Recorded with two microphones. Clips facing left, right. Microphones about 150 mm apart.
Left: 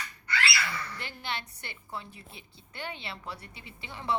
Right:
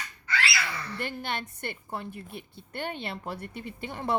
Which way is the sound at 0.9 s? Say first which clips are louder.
Right 5 dB; 50° right (ahead or behind).